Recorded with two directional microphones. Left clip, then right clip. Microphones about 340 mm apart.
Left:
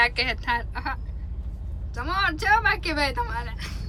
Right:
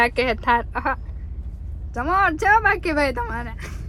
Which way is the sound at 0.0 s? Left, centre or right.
Centre.